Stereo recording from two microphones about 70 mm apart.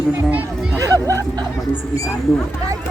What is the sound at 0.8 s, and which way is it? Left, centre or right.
Speech, right.